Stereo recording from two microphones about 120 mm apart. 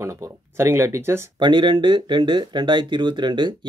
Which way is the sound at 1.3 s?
40° right (ahead or behind).